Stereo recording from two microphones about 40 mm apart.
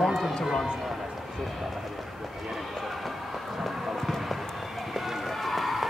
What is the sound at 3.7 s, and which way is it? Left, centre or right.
Run, centre.